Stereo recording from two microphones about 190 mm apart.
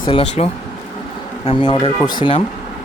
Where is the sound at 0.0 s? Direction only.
30° left (ahead or behind).